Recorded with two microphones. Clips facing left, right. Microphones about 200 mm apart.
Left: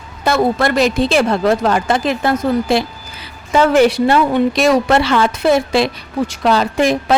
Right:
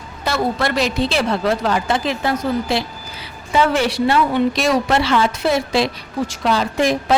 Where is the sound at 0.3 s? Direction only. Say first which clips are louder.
Left 5 dB; 50° left (ahead or behind).